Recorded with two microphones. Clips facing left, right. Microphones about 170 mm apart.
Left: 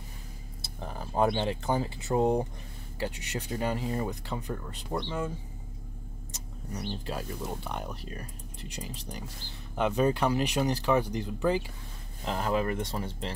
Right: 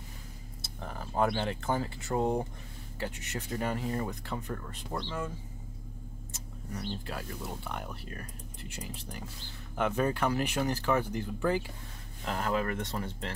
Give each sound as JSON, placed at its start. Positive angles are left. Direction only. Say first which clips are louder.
{"t": 0.7, "sound": "speech", "louder": "left 2 dB", "side_deg": 15}
{"t": 6.3, "sound": "speech", "louder": "left 2 dB", "side_deg": 20}
{"t": 9.8, "sound": "speech", "louder": "left 3 dB", "side_deg": 20}